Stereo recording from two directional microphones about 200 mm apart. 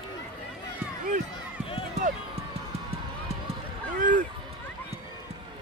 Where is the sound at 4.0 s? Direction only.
40° right (ahead or behind).